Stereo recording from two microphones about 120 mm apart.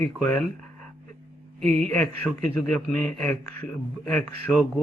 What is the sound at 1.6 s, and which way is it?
A man's voice, 10° left (ahead or behind).